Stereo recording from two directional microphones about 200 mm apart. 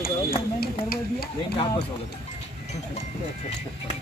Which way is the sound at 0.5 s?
50° left (ahead or behind).